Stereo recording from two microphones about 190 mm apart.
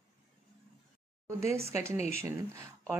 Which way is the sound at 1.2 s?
15° right (ahead or behind).